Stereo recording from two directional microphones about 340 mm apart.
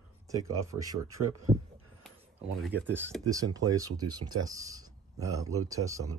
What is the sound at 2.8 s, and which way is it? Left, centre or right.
Speech, centre.